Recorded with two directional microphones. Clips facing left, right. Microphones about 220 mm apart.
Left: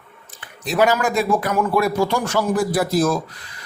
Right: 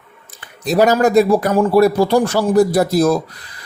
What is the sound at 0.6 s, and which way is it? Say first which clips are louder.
A man's voice: right 5 dB; 40° right (ahead or behind).